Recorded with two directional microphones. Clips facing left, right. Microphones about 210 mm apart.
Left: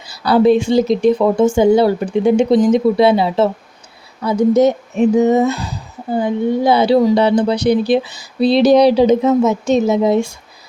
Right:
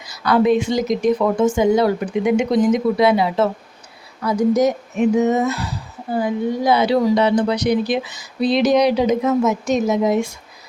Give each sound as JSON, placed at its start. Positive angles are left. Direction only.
{"t": 0.0, "sound": "speech", "side_deg": 30}